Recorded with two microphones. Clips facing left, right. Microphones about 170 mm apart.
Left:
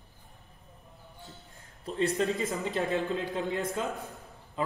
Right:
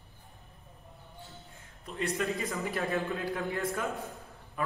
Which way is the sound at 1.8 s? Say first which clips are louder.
Left 6 dB; 35° left (ahead or behind).